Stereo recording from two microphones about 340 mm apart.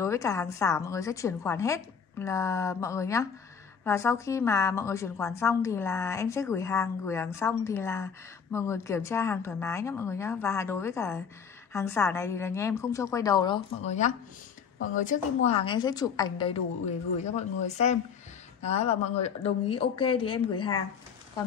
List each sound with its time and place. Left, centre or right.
0.0 s a woman's voice: centre